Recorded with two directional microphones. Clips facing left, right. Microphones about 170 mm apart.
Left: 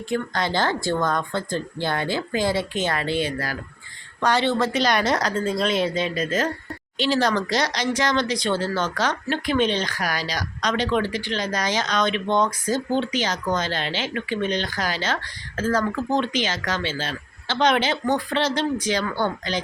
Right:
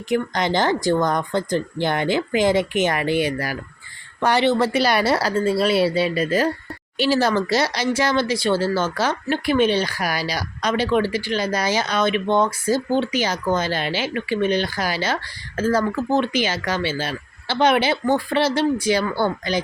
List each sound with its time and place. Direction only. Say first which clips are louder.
0.1 s speech: right 4 dB; 20° right (ahead or behind)